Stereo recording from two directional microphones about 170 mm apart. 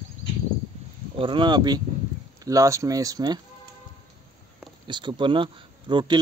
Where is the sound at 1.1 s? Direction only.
30° right (ahead or behind).